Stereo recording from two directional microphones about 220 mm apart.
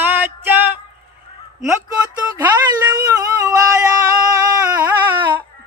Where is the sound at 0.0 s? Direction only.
10° right (ahead or behind).